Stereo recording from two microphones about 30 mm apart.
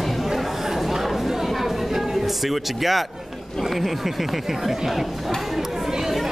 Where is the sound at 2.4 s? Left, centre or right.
Centre.